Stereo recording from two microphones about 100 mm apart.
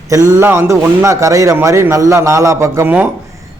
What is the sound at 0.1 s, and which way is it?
A man's voice, 30° right (ahead or behind).